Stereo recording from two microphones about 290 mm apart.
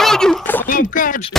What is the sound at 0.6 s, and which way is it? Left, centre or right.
Speech, left.